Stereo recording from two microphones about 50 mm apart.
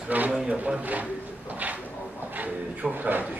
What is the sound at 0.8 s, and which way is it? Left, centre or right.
Speech, right.